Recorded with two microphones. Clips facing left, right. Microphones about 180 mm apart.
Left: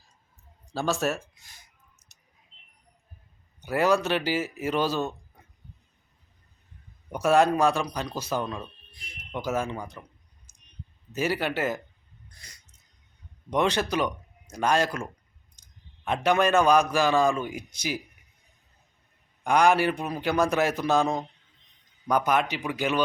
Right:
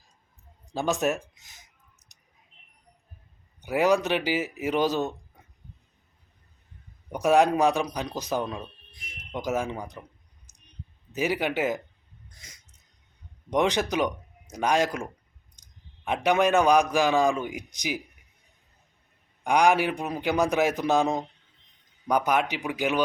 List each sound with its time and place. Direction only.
0.7 s a man's voice: 15° right (ahead or behind)
2.0 s a sound: 15° right (ahead or behind)
3.6 s a man's voice: 15° right (ahead or behind)
7.1 s a man's voice: 15° right (ahead or behind)
11.1 s a man's voice: 15° right (ahead or behind)
12.3 s a sound: 20° right (ahead or behind)
13.5 s a man's voice: 15° right (ahead or behind)
19.5 s a man's voice: 15° right (ahead or behind)